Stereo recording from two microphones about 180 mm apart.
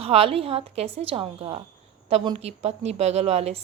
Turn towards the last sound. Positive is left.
turn(degrees=-35)  # may be behind; listen again after turning